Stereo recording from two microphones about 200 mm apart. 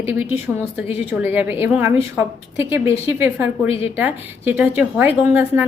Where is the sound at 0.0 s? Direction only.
10° right (ahead or behind).